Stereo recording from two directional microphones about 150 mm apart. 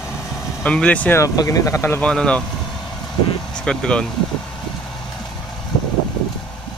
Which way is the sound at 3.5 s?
5° left (ahead or behind).